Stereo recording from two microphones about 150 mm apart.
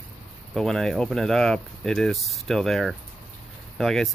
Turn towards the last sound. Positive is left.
turn(degrees=0)  # may be behind; listen again after turning